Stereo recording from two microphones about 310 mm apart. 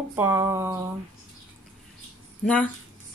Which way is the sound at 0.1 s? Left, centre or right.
Centre.